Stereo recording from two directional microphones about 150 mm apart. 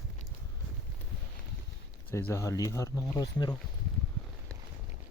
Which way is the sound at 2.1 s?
15° left (ahead or behind).